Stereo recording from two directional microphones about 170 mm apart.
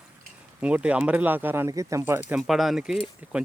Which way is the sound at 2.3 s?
Centre (ahead or behind).